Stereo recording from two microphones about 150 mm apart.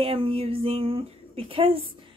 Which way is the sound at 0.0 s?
40° right (ahead or behind).